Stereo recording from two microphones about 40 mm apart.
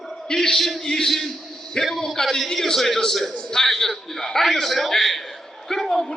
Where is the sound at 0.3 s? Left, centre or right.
Centre.